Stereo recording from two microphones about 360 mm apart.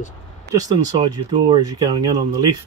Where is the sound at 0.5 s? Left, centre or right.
Centre.